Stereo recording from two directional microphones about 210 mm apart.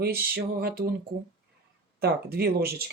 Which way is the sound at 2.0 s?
50° right (ahead or behind).